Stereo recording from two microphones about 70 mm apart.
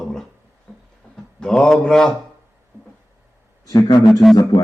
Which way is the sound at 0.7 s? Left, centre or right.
Centre.